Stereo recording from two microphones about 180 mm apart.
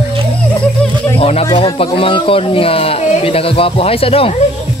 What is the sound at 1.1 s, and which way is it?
Speech, 35° left (ahead or behind).